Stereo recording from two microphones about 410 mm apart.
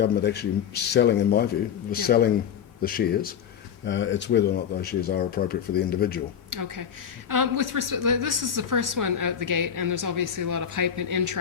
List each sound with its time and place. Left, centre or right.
0.0 s speech: left
6.5 s a woman's voice: right